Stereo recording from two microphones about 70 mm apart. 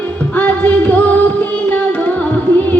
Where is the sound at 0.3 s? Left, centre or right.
Left.